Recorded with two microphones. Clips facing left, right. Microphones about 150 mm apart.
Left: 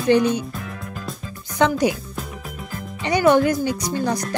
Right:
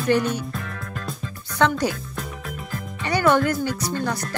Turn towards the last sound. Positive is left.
turn(degrees=15)  # may be behind; listen again after turning